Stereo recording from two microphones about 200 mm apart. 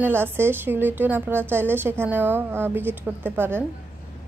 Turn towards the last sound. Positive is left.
turn(degrees=-10)  # may be behind; listen again after turning